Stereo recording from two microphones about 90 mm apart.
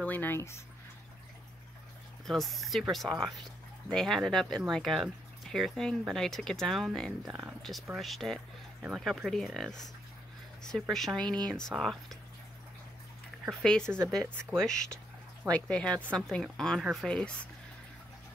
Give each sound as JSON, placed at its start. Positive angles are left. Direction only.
{"t": 0.0, "sound": "speech", "side_deg": 20}
{"t": 2.2, "sound": "a woman's voice", "side_deg": 0}
{"t": 13.5, "sound": "a woman's voice", "side_deg": 5}